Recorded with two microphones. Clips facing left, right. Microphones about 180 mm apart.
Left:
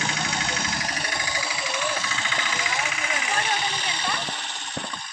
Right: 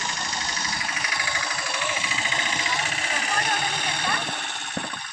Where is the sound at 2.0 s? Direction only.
20° right (ahead or behind); by 4.9 s 55° right (ahead or behind).